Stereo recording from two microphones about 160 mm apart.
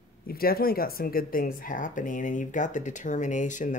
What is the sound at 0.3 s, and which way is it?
Speech, 70° left (ahead or behind).